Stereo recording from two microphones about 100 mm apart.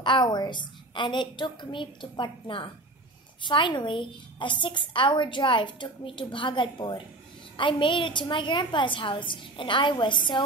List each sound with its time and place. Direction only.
0.0 s a woman's voice: 50° left (ahead or behind)